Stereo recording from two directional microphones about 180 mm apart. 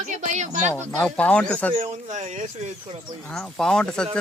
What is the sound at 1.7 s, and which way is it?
Speech, 40° right (ahead or behind).